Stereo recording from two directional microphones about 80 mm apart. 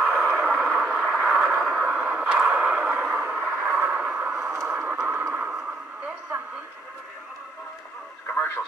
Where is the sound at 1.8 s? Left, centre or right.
Right; by 3.2 s centre.